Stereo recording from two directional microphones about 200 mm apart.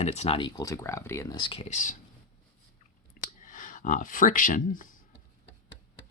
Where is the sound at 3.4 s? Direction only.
40° left (ahead or behind).